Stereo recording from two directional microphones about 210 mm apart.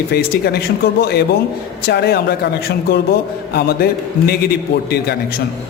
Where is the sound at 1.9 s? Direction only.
50° left (ahead or behind).